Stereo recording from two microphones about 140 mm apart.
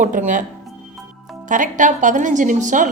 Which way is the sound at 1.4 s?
65° right (ahead or behind).